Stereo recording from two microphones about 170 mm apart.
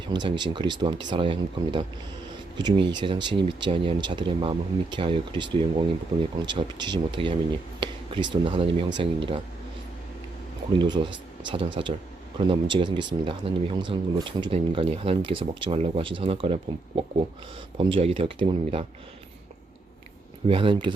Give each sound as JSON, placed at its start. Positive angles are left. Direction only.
{"t": 0.1, "sound": "speech", "side_deg": -25}
{"t": 10.8, "sound": "speech", "side_deg": -25}
{"t": 20.5, "sound": "speech", "side_deg": -30}